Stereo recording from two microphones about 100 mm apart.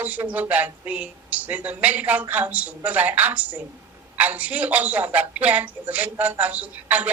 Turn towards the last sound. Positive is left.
turn(degrees=-15)  # may be behind; listen again after turning